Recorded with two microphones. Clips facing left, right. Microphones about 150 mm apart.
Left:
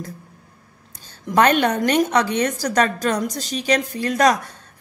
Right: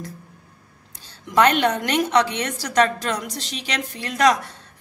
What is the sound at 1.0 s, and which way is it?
A woman's voice, 45° left (ahead or behind).